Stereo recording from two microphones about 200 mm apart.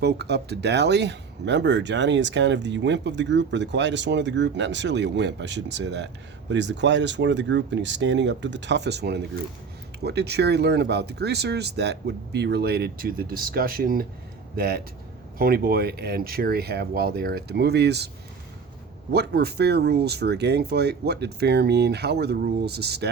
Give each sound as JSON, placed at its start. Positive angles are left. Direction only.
{"t": 0.0, "sound": "speech", "side_deg": -55}
{"t": 19.1, "sound": "speech", "side_deg": -55}